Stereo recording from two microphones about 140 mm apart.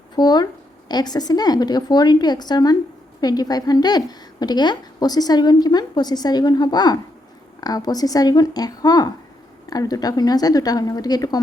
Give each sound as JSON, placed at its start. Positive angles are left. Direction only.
{"t": 0.2, "sound": "a woman's voice", "side_deg": 30}